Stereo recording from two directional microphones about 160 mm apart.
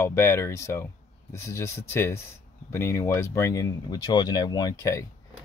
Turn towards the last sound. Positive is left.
turn(degrees=20)  # may be behind; listen again after turning